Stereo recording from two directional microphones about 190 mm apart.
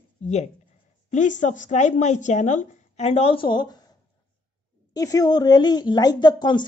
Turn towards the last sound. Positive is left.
turn(degrees=25)  # may be behind; listen again after turning